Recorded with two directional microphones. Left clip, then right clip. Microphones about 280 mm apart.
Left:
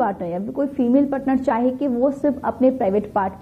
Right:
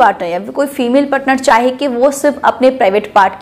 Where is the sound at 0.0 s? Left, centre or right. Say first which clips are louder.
Right 12 dB; centre.